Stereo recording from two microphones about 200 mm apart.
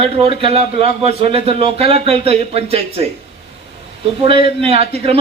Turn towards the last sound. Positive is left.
turn(degrees=-30)  # may be behind; listen again after turning